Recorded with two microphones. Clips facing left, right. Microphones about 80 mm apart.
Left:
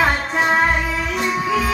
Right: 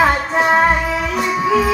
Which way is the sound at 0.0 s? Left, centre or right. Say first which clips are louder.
Right 4 dB; centre.